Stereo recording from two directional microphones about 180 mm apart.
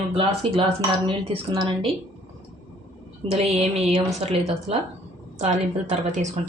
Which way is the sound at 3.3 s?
35° right (ahead or behind).